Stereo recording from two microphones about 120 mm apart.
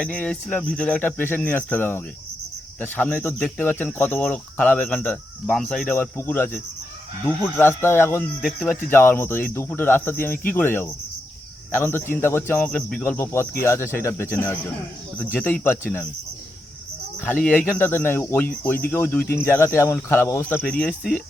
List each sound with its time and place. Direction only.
0.0 s speech: 10° left (ahead or behind)
5.5 s speech: 5° left (ahead or behind)
5.9 s speech: 15° left (ahead or behind)
8.4 s speech: centre (ahead or behind)
8.9 s speech: 20° left (ahead or behind)
17.2 s speech: 15° left (ahead or behind)
20.7 s speech: 10° left (ahead or behind)